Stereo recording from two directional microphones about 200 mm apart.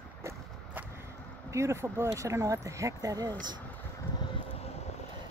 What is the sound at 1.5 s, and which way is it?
Speech, 15° right (ahead or behind).